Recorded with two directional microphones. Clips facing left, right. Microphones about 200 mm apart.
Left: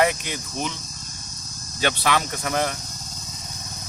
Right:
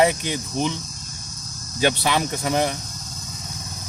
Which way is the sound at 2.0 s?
20° right (ahead or behind).